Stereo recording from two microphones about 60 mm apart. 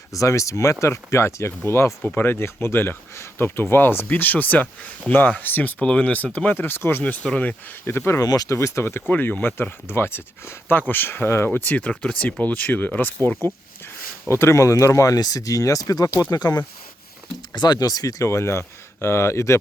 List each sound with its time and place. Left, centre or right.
0.1 s speech: left
2.1 s speech: left
5.8 s speech: centre; by 7.0 s left
7.0 s speech: left
7.9 s speech: left
8.2 s speech: left
8.4 s speech: left
9.0 s speech: left
9.8 s speech: left
14.3 s speech: left
14.6 s speech: left
17.7 s speech: left
18.2 s speech: left